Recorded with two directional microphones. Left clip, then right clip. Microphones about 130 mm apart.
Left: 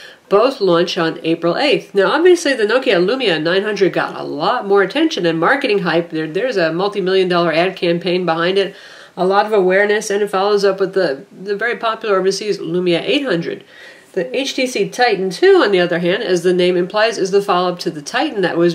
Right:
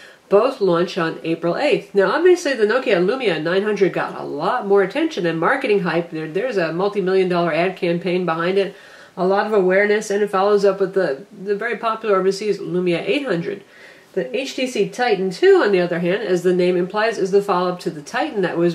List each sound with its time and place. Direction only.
0.3 s speech: 30° left (ahead or behind)
14.6 s speech: 35° left (ahead or behind)